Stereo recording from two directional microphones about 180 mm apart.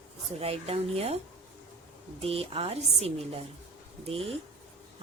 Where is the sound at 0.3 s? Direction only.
35° right (ahead or behind).